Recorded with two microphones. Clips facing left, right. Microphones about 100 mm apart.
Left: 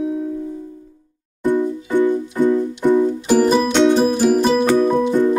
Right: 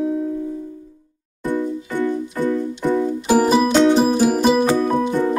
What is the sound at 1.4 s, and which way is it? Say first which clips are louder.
Music: left 4 dB; 20° left (ahead or behind).